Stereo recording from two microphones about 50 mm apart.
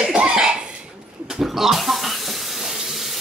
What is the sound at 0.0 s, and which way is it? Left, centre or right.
Cough, centre.